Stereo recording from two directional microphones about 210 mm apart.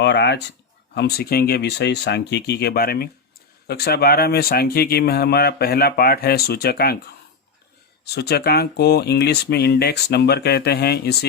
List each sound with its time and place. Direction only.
0.0 s speech: 55° left (ahead or behind)
8.0 s speech: 50° left (ahead or behind)